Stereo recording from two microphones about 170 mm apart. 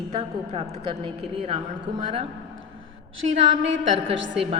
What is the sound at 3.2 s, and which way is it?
Speech, 40° right (ahead or behind).